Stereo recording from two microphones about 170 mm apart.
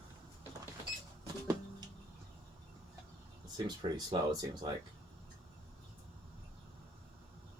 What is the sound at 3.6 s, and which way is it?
Speech, 25° right (ahead or behind).